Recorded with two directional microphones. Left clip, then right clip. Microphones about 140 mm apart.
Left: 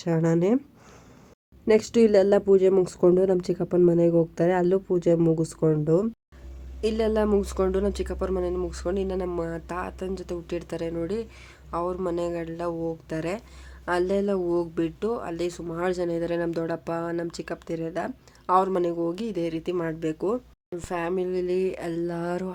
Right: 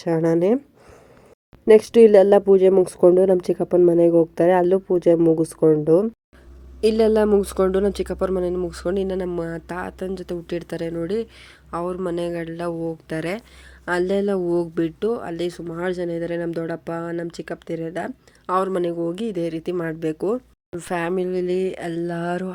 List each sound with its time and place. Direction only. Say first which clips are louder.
0.0 s speech: right 5 dB; 15° right (ahead or behind)
1.6 s speech: right 8 dB; 15° right (ahead or behind)
6.8 s speech: right 7 dB; 40° right (ahead or behind)